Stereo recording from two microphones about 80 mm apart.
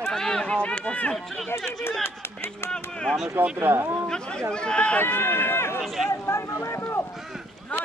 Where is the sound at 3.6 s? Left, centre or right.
Right.